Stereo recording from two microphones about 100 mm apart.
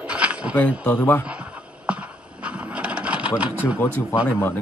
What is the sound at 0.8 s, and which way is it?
Speech, 20° left (ahead or behind).